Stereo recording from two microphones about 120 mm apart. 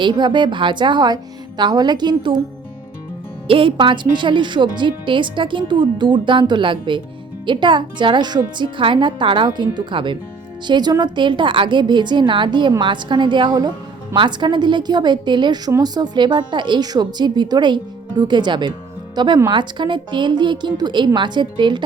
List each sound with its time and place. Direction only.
0.0 s speech: 40° right (ahead or behind)
3.4 s speech: 45° right (ahead or behind)